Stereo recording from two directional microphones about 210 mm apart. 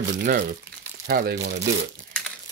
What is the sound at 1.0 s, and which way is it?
Speech, 50° right (ahead or behind).